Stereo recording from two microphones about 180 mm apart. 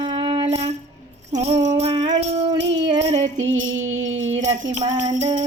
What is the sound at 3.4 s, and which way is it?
Music, 90° right.